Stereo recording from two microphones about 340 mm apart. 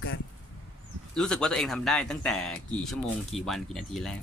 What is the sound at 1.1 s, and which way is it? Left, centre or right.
Speech, centre.